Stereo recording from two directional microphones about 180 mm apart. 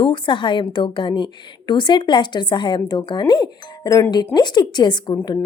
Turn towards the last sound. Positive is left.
turn(degrees=25)  # may be behind; listen again after turning